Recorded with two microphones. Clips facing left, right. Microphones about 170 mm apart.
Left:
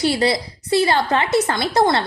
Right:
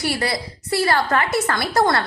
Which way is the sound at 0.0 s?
25° left (ahead or behind).